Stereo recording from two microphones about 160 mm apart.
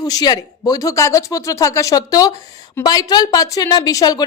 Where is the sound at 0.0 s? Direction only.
25° left (ahead or behind).